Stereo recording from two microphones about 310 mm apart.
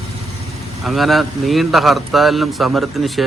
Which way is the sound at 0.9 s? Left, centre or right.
Centre.